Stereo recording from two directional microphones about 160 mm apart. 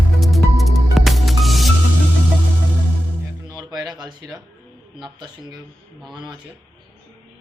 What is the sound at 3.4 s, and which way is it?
Music, 25° right (ahead or behind).